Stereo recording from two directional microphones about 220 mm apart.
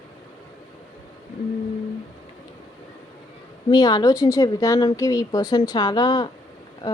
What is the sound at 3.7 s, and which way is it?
Speech, 20° left (ahead or behind).